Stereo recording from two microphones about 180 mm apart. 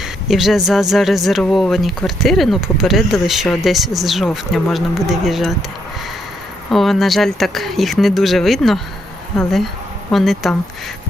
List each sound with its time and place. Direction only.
0.0 s speech: centre (ahead or behind)
6.7 s speech: centre (ahead or behind)